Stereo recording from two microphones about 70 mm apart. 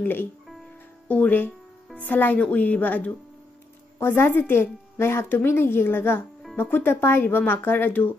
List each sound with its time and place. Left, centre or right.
0.0 s a woman's voice: left